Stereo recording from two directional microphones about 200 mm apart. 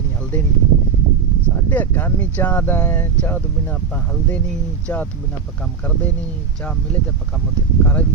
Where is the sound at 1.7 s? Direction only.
10° left (ahead or behind).